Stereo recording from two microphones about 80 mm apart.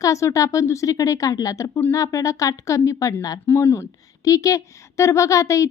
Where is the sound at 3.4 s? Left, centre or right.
Left.